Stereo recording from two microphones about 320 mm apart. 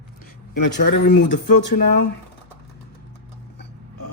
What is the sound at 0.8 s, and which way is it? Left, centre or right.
Speech, left.